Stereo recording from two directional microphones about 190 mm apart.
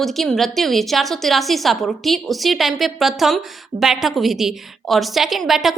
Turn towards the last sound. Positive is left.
turn(degrees=0)  # may be behind; listen again after turning